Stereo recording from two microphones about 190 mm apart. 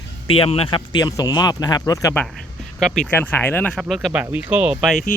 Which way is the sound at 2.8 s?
5° left (ahead or behind).